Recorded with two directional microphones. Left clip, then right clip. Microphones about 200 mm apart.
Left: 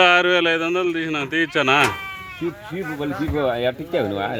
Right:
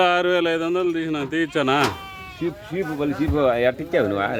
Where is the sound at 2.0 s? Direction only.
25° right (ahead or behind).